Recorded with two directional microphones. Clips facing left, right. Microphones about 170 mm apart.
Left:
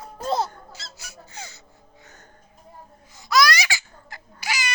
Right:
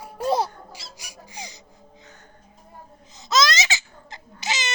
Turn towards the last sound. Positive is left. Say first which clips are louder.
# right 1 dB
turn(degrees=-20)  # may be behind; listen again after turning